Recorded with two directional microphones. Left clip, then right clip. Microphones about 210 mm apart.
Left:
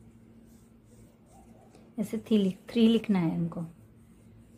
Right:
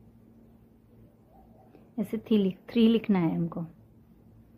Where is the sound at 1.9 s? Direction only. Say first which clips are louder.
Right 1 dB; 10° right (ahead or behind).